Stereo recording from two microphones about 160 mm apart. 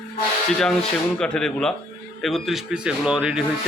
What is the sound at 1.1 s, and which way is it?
A man's voice, 5° left (ahead or behind).